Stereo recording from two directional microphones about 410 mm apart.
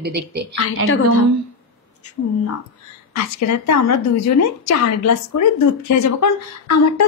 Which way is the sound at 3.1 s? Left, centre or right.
Left.